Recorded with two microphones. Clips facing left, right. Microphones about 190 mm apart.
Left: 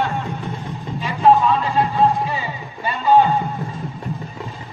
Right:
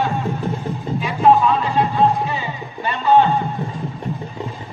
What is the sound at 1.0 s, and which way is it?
Music, centre (ahead or behind).